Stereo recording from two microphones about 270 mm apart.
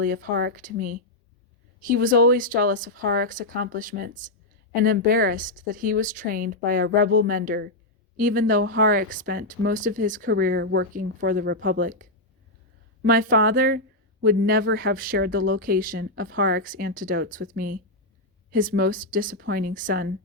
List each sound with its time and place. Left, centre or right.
0.0 s speech: right